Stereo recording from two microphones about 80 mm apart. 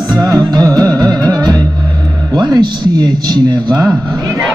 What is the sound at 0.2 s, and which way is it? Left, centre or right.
Music, right.